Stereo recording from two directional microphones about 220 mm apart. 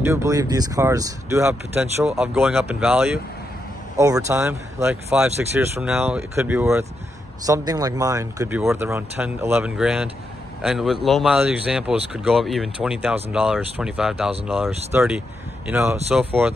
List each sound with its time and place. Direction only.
0.0 s speech: 15° right (ahead or behind)